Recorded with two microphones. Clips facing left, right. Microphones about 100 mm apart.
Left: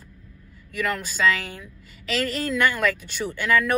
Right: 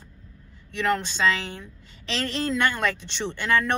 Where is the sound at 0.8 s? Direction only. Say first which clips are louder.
Even; 30° right (ahead or behind).